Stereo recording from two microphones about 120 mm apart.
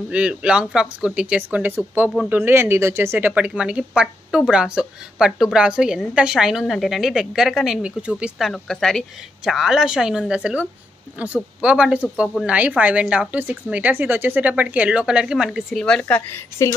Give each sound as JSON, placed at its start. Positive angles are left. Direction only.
{"t": 0.1, "sound": "speech", "side_deg": -10}
{"t": 15.8, "sound": "speech", "side_deg": 10}